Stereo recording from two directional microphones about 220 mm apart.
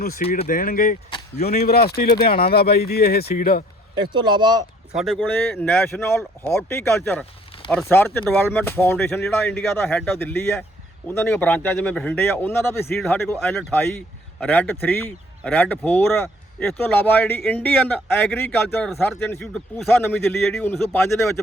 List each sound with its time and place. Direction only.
0.3 s speech: 40° left (ahead or behind)
3.9 s speech: 20° right (ahead or behind)
4.9 s speech: centre (ahead or behind)